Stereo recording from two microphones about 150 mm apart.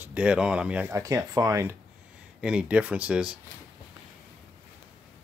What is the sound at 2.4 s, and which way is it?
Speech, 5° right (ahead or behind).